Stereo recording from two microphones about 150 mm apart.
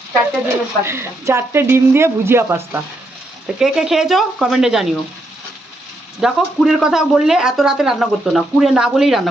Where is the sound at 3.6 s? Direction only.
5° right (ahead or behind).